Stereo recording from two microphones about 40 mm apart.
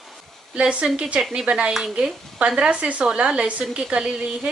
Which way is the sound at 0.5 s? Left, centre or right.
Right.